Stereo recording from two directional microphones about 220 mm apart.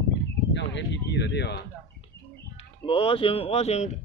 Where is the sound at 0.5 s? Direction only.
55° left (ahead or behind).